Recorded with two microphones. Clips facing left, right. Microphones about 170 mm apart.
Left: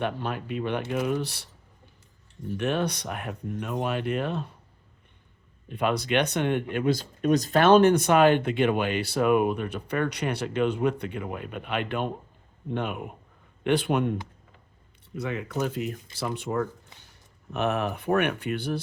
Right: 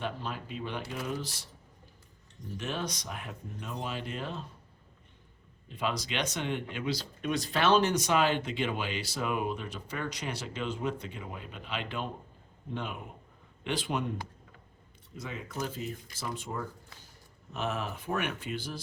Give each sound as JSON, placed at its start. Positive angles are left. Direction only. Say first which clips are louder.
{"t": 0.0, "sound": "speech", "louder": "left 7 dB", "side_deg": 65}
{"t": 2.6, "sound": "speech", "louder": "left 9 dB", "side_deg": 60}
{"t": 5.6, "sound": "speech", "louder": "left 7 dB", "side_deg": 60}
{"t": 15.1, "sound": "speech", "louder": "left 9 dB", "side_deg": 65}